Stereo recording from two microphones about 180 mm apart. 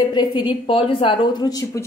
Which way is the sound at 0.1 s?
25° left (ahead or behind).